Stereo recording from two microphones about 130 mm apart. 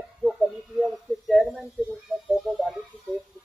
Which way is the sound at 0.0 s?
Centre (ahead or behind).